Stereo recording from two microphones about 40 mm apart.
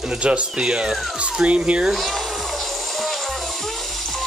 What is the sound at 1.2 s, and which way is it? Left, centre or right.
Speech, right.